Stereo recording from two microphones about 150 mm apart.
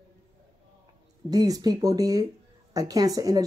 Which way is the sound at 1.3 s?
25° right (ahead or behind).